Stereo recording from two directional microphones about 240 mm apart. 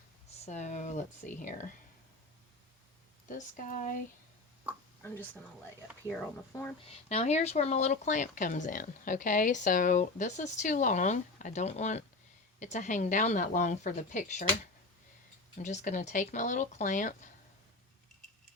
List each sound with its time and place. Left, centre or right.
0.4 s speech: left
3.2 s speech: left
5.0 s speech: centre
7.1 s speech: left
15.5 s speech: left